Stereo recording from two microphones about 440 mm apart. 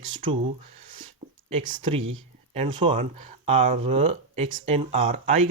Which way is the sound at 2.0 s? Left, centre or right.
Right.